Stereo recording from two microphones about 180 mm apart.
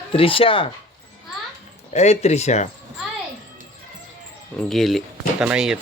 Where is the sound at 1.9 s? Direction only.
40° left (ahead or behind).